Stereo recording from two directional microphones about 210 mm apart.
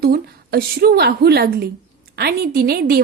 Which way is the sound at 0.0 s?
45° right (ahead or behind).